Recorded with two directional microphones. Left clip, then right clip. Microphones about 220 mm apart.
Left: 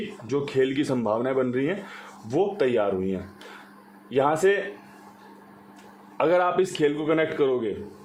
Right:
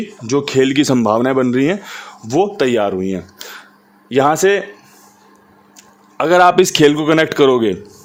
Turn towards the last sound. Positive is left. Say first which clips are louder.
# right 11 dB
turn(degrees=-55)  # may be behind; listen again after turning